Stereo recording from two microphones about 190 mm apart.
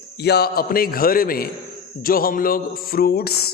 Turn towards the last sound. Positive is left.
turn(degrees=55)  # may be behind; listen again after turning